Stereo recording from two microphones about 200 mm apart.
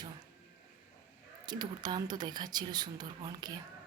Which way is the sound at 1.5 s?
20° right (ahead or behind).